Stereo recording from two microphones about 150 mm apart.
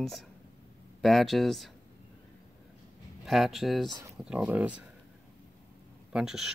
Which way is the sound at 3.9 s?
20° right (ahead or behind).